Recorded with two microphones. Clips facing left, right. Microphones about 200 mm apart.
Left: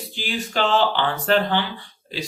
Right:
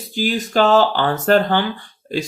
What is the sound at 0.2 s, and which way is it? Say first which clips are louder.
Speech: right 7 dB; 40° right (ahead or behind).